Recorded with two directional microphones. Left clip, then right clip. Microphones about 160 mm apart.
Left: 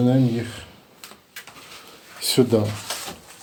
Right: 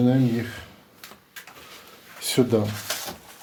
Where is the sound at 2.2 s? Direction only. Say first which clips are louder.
Left 3 dB; 15° left (ahead or behind).